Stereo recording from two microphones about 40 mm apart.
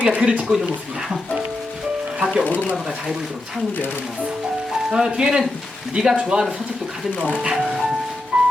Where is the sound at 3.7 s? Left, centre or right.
Left.